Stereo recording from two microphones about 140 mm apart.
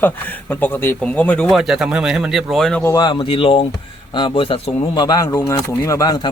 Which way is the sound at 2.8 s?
30° left (ahead or behind).